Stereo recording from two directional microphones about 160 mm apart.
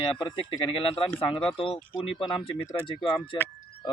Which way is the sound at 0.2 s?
35° left (ahead or behind).